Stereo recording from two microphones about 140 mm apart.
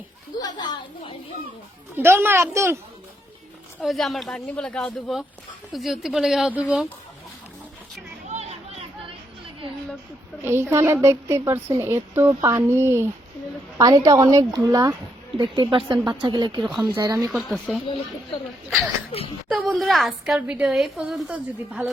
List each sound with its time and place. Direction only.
0.3 s a woman's voice: 30° left (ahead or behind)
2.0 s a woman's voice: 15° right (ahead or behind)
3.8 s a woman's voice: centre (ahead or behind)
8.3 s chatter: 50° right (ahead or behind)
10.4 s a woman's voice: 15° right (ahead or behind)
17.3 s a woman's voice: centre (ahead or behind)
19.5 s a woman's voice: centre (ahead or behind)